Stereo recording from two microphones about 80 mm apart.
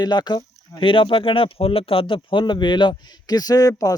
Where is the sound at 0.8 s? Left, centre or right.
Left.